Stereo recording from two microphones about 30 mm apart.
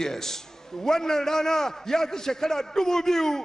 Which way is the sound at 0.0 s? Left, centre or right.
Centre.